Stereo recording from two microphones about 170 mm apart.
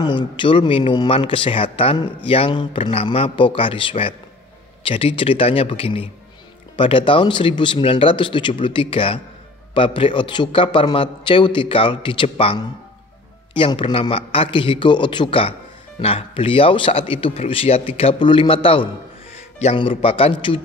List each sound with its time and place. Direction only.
0.0 s a man's voice: 30° left (ahead or behind)